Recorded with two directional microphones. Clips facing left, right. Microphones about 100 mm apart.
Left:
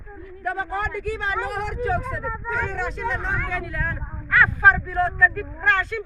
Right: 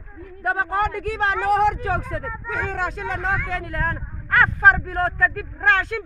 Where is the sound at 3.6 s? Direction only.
60° right (ahead or behind).